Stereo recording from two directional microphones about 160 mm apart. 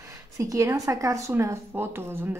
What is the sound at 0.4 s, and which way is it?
A woman's voice, 20° right (ahead or behind).